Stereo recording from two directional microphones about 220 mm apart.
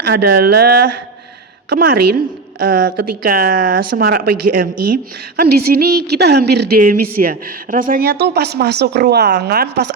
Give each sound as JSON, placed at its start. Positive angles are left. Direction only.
{"t": 0.0, "sound": "a woman's voice", "side_deg": -50}